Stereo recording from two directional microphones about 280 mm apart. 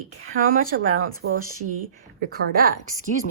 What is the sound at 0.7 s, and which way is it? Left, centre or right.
Speech, right.